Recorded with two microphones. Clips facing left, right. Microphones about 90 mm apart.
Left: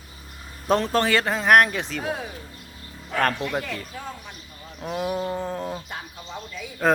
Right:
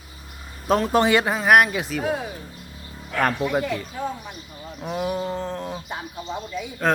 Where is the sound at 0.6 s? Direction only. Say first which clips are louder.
Right 1 dB; 5° right (ahead or behind).